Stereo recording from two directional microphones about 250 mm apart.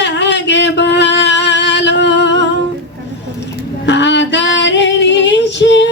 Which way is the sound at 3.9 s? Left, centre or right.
Left.